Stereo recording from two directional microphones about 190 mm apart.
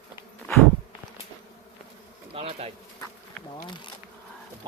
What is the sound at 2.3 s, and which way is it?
Bird, 30° right (ahead or behind).